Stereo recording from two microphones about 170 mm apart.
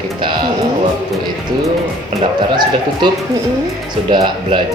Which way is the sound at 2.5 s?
25° right (ahead or behind).